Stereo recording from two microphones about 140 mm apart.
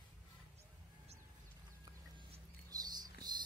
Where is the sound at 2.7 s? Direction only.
30° right (ahead or behind).